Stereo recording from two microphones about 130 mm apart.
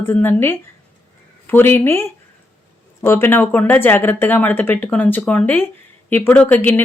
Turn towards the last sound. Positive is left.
turn(degrees=15)  # may be behind; listen again after turning